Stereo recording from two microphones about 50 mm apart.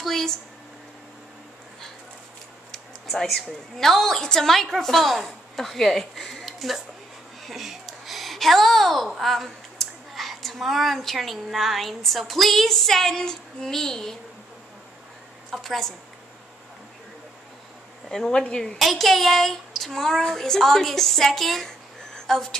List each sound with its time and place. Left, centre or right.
0.0 s speech: centre
2.7 s a woman's voice: centre
7.4 s a sound: centre
9.1 s a woman's voice: centre
15.5 s a woman's voice: centre
18.0 s speech: centre